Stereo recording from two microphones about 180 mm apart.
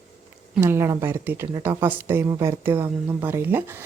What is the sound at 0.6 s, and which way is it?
Speech, 15° right (ahead or behind).